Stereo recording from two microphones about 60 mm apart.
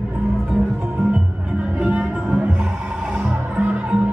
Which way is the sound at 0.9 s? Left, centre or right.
Centre.